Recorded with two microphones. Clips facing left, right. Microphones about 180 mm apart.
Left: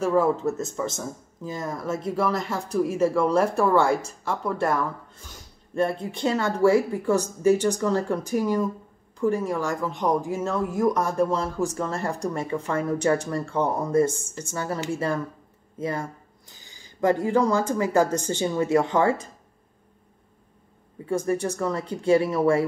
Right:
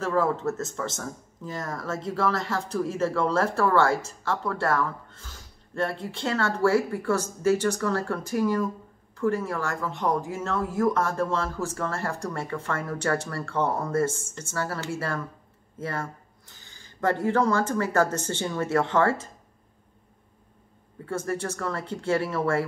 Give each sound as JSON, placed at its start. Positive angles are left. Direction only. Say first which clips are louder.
{"t": 0.0, "sound": "speech", "louder": "left 3 dB", "side_deg": 15}
{"t": 21.0, "sound": "speech", "louder": "left 5 dB", "side_deg": 15}